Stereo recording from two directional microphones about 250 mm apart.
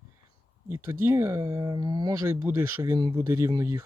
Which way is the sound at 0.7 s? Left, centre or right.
Centre.